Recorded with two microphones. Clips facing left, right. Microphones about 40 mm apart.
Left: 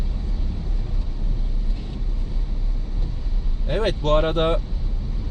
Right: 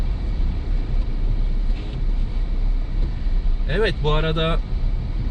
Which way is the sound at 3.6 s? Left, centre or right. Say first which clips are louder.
Right 1 dB; right.